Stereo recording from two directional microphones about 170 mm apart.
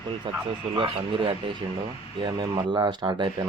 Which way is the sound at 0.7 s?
30° right (ahead or behind).